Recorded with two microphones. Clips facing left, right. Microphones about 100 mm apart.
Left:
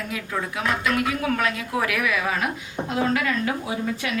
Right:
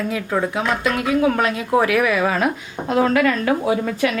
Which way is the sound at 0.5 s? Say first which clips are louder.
Right 3 dB; 30° right (ahead or behind).